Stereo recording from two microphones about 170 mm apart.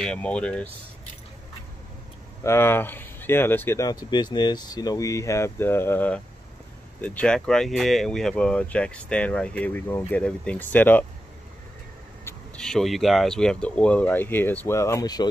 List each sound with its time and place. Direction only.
0.0 s speech: 5° left (ahead or behind)
2.4 s speech: 15° left (ahead or behind)
12.5 s speech: centre (ahead or behind); by 15.2 s 20° left (ahead or behind)